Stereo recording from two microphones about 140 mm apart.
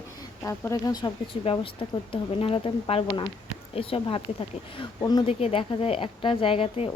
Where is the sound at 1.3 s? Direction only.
40° left (ahead or behind).